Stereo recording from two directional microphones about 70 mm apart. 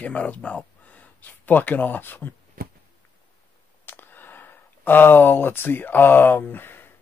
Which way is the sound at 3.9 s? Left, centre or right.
Left.